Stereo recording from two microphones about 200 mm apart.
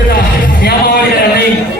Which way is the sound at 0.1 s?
50° left (ahead or behind).